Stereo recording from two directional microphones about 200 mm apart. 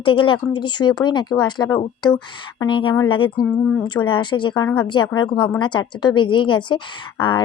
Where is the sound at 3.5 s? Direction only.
5° left (ahead or behind).